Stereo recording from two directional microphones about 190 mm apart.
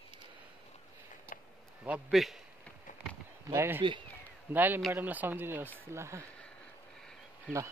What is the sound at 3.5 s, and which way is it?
Speech, 15° right (ahead or behind).